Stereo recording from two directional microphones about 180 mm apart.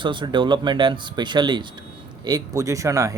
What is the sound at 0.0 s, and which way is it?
Speech, 25° right (ahead or behind).